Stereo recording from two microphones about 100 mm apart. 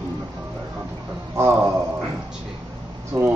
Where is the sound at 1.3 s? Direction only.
30° right (ahead or behind).